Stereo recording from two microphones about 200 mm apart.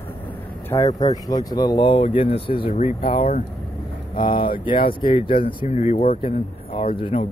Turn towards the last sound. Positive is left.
turn(degrees=25)  # may be behind; listen again after turning